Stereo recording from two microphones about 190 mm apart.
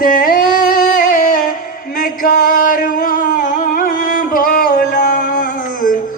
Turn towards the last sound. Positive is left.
turn(degrees=50)  # may be behind; listen again after turning